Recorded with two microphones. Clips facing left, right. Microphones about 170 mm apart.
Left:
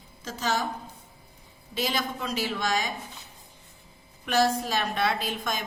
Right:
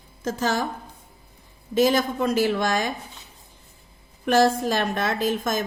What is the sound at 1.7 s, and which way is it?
A woman's voice, 50° right (ahead or behind).